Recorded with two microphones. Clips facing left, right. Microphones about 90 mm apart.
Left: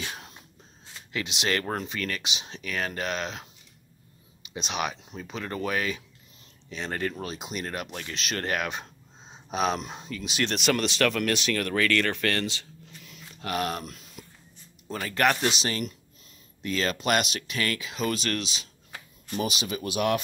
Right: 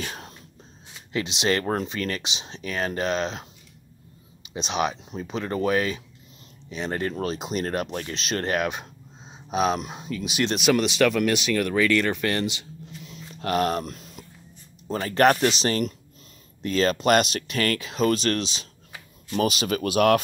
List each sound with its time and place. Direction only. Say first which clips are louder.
0.0 s whispering: right 3 dB; 40° right (ahead or behind)
1.1 s speech: right 4 dB; 25° right (ahead or behind)
7.2 s speech: right 7 dB; 35° right (ahead or behind); by 13.1 s 15° right (ahead or behind)
13.4 s speech: right 6 dB; 40° right (ahead or behind)
19.3 s speech: right 6 dB; 55° right (ahead or behind)